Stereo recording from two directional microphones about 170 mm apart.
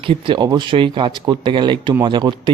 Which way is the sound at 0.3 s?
25° right (ahead or behind).